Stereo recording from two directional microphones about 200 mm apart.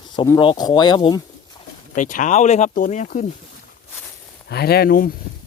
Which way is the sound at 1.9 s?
40° left (ahead or behind).